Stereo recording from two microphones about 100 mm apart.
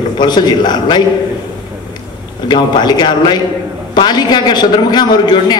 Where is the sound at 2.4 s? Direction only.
45° left (ahead or behind).